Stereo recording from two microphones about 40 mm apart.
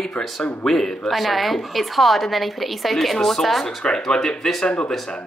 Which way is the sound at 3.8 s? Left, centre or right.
Centre.